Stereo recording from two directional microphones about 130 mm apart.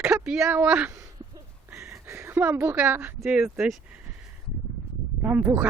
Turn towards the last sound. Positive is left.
turn(degrees=-15)  # may be behind; listen again after turning